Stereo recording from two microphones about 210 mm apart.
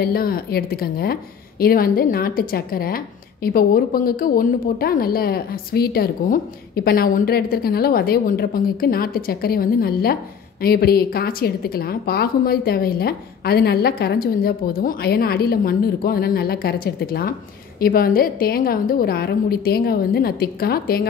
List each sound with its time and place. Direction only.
0.0 s a woman's voice: 45° left (ahead or behind)